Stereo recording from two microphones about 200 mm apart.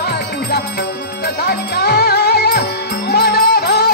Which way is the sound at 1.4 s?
55° left (ahead or behind).